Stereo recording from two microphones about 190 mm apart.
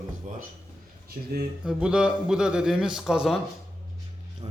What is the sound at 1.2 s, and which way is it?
Speech, 45° right (ahead or behind).